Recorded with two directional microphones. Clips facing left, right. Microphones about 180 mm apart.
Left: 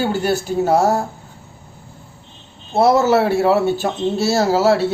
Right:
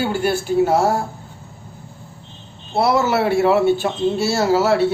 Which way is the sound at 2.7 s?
40° left (ahead or behind).